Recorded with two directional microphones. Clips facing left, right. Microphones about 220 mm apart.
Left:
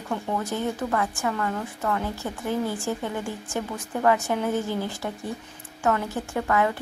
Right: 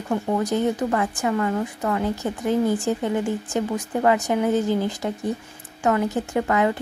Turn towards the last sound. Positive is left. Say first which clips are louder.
# right 3 dB
turn(degrees=-15)  # may be behind; listen again after turning